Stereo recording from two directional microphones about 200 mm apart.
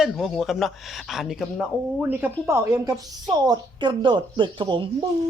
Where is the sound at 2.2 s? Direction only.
15° right (ahead or behind).